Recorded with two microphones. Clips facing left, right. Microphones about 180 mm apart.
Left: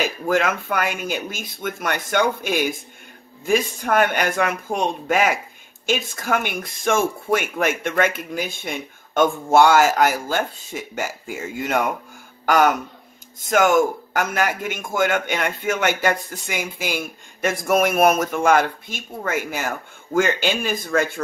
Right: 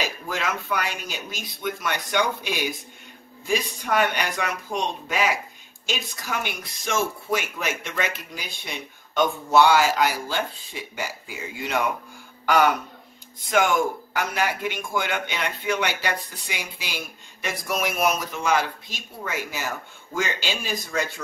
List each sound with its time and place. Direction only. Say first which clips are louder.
0.0 s a man's voice: left 8 dB; 50° left (ahead or behind)